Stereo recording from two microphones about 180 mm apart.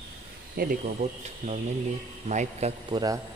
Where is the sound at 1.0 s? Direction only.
35° right (ahead or behind).